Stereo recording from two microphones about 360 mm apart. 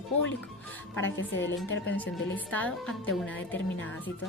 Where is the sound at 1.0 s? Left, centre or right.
Left.